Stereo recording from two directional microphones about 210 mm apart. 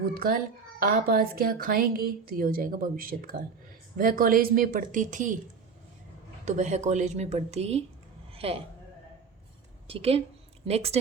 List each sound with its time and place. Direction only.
0.0 s speech: 45° right (ahead or behind)
6.4 s a woman's voice: 35° right (ahead or behind)
9.8 s a woman's voice: 25° right (ahead or behind)